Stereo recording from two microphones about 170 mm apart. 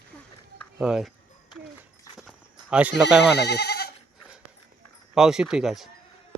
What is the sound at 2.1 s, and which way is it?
Horse, 5° right (ahead or behind).